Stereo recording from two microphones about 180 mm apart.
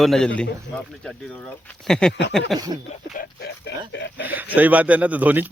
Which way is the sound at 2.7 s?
25° right (ahead or behind).